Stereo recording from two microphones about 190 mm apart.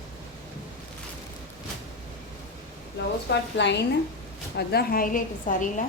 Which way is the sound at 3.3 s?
65° left (ahead or behind).